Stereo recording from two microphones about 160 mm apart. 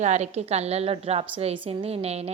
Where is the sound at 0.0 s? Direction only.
45° right (ahead or behind).